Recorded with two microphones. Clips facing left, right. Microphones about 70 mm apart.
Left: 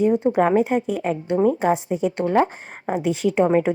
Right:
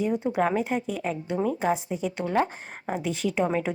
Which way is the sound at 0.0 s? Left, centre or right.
Left.